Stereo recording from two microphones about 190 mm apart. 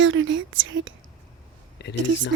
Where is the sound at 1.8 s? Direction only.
65° left (ahead or behind).